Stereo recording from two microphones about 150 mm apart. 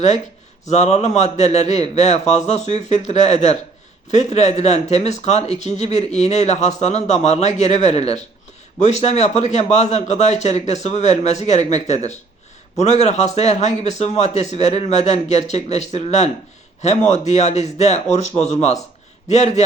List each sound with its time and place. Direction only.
0.7 s speech: 45° left (ahead or behind)